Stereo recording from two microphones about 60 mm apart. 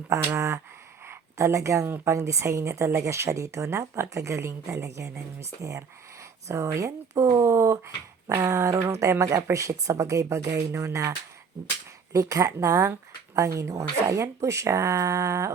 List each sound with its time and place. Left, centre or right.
0.1 s speech: right
1.0 s a sound: right
2.0 s speech: right
12.1 s speech: right